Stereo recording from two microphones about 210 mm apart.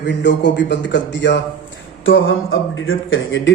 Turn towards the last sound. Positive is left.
turn(degrees=65)  # may be behind; listen again after turning